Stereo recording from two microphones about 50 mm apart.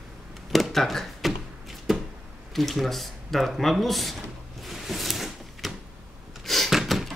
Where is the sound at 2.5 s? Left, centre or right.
Centre.